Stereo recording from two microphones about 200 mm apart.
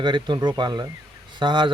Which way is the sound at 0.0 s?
20° right (ahead or behind).